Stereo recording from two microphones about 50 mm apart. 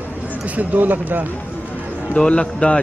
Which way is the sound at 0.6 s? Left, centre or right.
Right.